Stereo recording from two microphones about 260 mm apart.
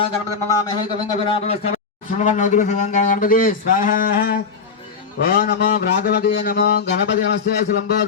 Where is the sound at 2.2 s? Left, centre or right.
Left.